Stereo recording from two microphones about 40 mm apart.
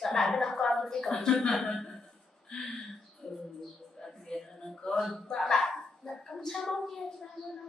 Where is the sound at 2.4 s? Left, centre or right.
Centre.